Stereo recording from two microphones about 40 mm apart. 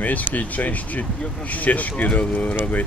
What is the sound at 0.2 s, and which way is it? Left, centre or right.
Speech, left.